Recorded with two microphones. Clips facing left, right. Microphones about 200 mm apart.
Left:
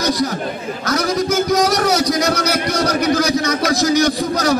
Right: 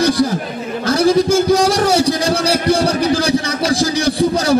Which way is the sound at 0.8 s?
30° right (ahead or behind).